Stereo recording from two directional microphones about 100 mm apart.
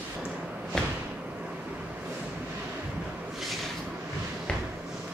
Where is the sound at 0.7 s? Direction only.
5° left (ahead or behind).